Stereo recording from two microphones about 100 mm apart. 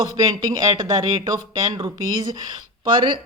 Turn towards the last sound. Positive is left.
turn(degrees=-50)  # may be behind; listen again after turning